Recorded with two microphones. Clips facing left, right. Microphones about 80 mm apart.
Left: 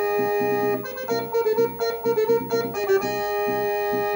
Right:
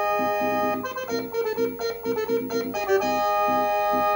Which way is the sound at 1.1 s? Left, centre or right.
Left.